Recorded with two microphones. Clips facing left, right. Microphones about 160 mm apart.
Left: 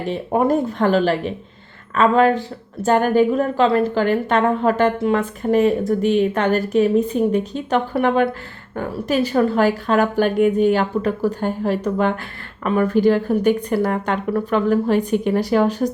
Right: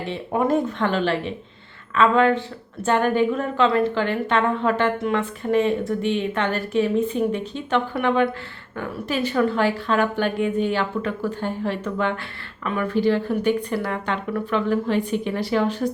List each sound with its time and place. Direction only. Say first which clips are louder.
0.1 s a woman's voice: left 3 dB; 40° left (ahead or behind)